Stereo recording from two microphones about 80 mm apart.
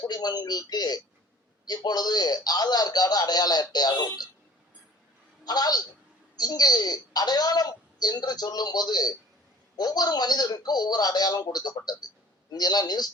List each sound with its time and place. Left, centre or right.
0.1 s a woman's voice: left
5.5 s a woman's voice: left